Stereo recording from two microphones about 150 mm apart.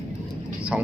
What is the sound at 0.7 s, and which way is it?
Speech, 10° right (ahead or behind).